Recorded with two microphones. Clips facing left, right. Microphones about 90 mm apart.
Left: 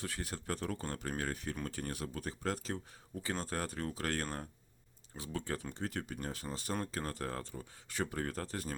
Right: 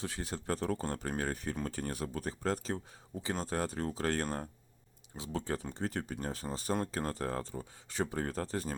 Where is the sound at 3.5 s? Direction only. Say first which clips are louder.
Right 4 dB; 25° right (ahead or behind).